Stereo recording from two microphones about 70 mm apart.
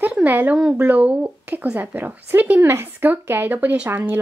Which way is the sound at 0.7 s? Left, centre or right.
Right.